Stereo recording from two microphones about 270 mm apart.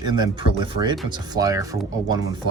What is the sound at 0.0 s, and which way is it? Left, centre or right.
Speech, centre.